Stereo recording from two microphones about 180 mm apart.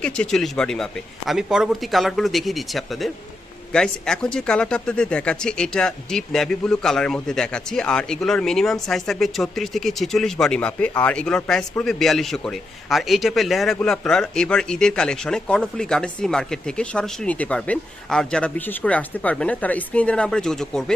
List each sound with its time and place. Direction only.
0.0 s speech: 5° left (ahead or behind)